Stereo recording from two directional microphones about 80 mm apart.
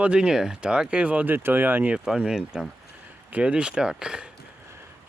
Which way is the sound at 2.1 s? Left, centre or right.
Centre.